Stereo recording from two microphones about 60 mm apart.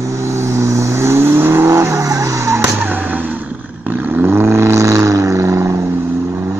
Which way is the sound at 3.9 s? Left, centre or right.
Right.